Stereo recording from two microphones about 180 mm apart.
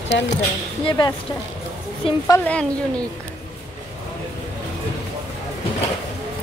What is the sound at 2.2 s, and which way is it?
Speech, 10° left (ahead or behind).